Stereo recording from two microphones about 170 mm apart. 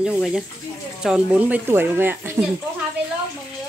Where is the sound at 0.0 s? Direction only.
5° right (ahead or behind).